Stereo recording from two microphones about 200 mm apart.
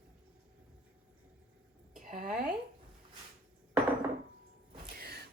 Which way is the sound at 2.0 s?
45° right (ahead or behind).